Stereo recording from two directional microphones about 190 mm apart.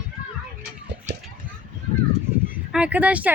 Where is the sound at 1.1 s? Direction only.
65° right (ahead or behind).